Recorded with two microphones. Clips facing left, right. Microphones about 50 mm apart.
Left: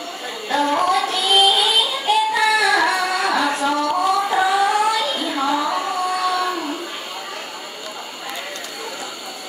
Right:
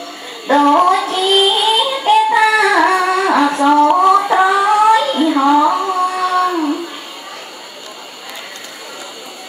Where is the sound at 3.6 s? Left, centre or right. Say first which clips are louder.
Right 9 dB; right.